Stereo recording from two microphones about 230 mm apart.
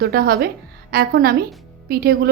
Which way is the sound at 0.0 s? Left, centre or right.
Right.